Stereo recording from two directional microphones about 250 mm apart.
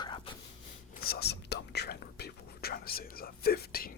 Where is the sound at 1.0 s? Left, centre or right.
Left.